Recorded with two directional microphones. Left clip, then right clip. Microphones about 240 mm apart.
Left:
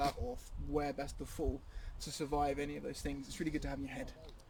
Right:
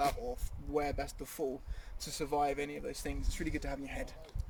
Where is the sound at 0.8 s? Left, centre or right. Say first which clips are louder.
Right 3 dB; centre.